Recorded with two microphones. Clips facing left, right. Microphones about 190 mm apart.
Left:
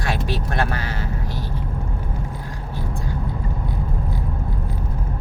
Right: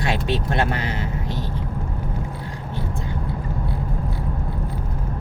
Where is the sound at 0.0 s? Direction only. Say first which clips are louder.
Right 2 dB; 20° right (ahead or behind).